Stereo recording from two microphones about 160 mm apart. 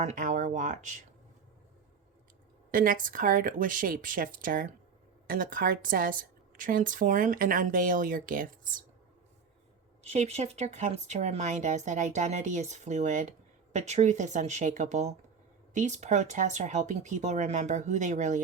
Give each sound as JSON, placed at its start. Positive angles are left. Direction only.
{"t": 0.0, "sound": "speech", "side_deg": -50}
{"t": 2.7, "sound": "a woman's voice", "side_deg": -60}
{"t": 10.0, "sound": "speech", "side_deg": -45}